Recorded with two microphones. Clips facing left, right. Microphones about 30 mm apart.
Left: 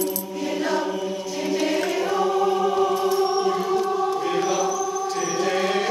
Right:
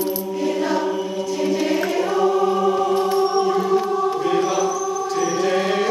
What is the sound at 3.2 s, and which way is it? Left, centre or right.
Music, centre.